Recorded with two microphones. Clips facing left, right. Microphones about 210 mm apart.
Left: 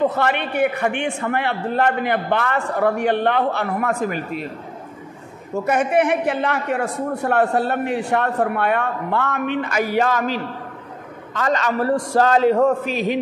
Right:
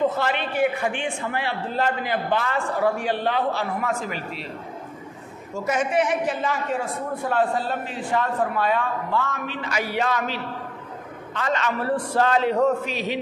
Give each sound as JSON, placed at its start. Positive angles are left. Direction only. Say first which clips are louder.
{"t": 0.1, "sound": "a man's voice", "louder": "left 4 dB", "side_deg": 60}
{"t": 5.5, "sound": "a man's voice", "louder": "left 5 dB", "side_deg": 60}